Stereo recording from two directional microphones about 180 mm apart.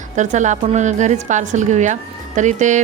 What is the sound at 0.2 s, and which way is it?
A woman's voice, 40° right (ahead or behind).